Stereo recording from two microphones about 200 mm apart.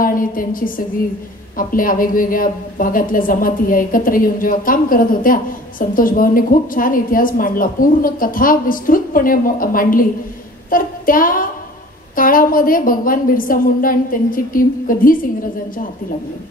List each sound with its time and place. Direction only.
0.0 s a woman's voice: 45° left (ahead or behind)
10.7 s child singing: 45° left (ahead or behind)
12.2 s a woman's voice: 45° left (ahead or behind)